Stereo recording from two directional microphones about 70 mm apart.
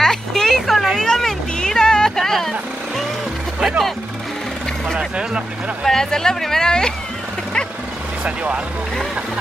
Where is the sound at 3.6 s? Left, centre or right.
Centre.